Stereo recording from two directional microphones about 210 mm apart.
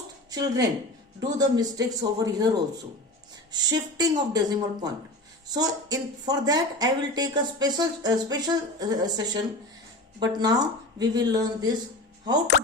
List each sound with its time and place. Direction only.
0.3 s speech: 15° right (ahead or behind)